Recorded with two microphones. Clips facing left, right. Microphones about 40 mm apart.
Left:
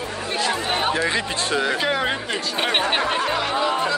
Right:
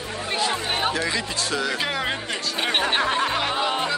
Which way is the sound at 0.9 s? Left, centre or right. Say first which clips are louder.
Left 3 dB; left.